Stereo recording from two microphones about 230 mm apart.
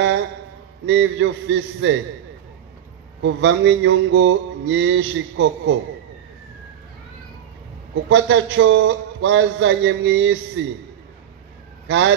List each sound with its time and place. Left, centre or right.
0.8 s mantra: right
3.2 s mantra: right
8.1 s a man's voice: right